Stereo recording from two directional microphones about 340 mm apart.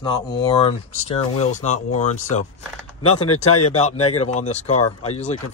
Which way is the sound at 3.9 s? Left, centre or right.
Left.